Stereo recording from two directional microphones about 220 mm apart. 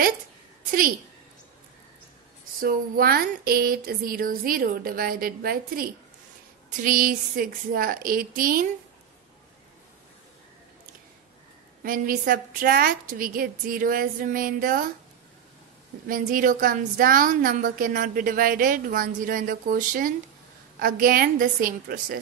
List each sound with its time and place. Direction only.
0.7 s a woman's voice: 40° right (ahead or behind)
2.6 s a woman's voice: 40° right (ahead or behind)
11.8 s a woman's voice: 40° right (ahead or behind)
16.1 s a woman's voice: 40° right (ahead or behind)